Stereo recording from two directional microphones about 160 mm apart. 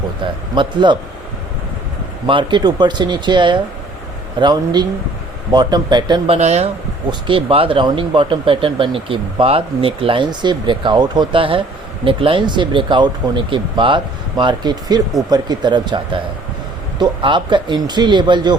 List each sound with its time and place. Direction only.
0.5 s speech: 30° right (ahead or behind)
2.2 s speech: 30° right (ahead or behind)
7.1 s speech: 30° right (ahead or behind)